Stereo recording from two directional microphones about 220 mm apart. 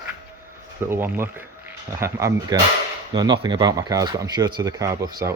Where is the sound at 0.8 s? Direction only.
10° right (ahead or behind).